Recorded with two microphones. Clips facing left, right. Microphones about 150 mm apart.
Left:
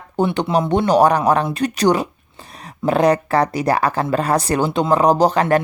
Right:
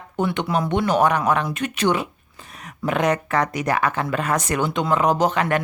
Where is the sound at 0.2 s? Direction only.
30° left (ahead or behind).